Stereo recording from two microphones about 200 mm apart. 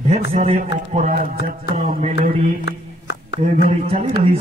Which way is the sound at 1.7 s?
35° right (ahead or behind).